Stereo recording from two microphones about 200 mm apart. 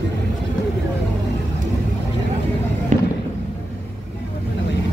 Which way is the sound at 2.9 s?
40° right (ahead or behind).